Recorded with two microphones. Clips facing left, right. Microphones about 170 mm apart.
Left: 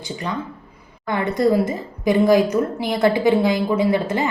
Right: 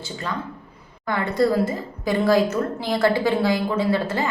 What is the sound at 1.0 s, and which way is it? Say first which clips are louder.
A woman's voice: left 2 dB; 20° left (ahead or behind).